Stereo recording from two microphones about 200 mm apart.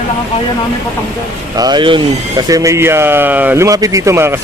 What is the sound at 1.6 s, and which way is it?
Speech, 20° right (ahead or behind).